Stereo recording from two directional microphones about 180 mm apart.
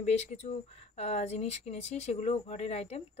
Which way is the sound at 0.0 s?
40° left (ahead or behind).